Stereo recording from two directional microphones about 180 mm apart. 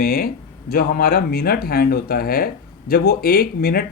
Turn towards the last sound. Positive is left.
turn(degrees=55)  # may be behind; listen again after turning